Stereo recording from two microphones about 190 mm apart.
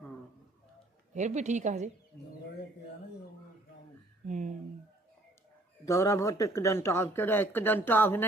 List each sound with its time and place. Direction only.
1.1 s a woman's voice: 40° right (ahead or behind)
4.3 s a woman's voice: 40° right (ahead or behind)
5.8 s speech: 15° left (ahead or behind)